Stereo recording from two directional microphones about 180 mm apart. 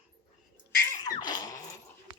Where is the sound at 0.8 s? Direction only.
20° left (ahead or behind).